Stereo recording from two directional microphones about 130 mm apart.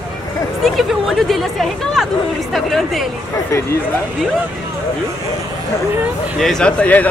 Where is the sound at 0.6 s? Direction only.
Centre (ahead or behind).